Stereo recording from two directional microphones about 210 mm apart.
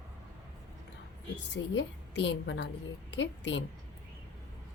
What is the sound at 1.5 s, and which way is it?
A woman's voice, 60° left (ahead or behind).